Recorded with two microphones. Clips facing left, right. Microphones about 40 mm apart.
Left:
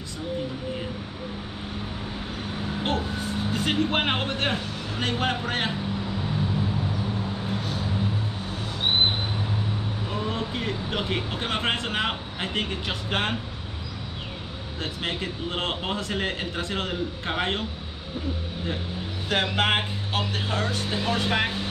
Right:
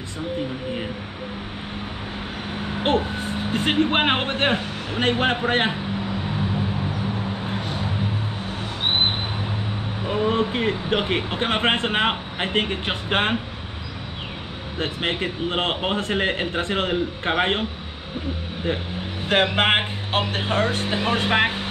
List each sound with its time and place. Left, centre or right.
2.6 s speech: right
10.0 s speech: right
14.8 s speech: right
19.2 s speech: right